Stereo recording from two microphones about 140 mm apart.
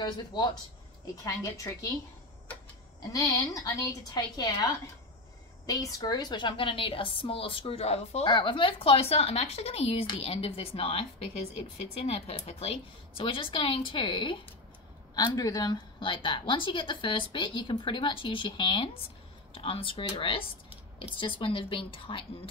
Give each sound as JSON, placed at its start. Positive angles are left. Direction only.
{"t": 0.0, "sound": "a woman's voice", "side_deg": 30}
{"t": 3.0, "sound": "a woman's voice", "side_deg": 30}
{"t": 5.7, "sound": "a woman's voice", "side_deg": 25}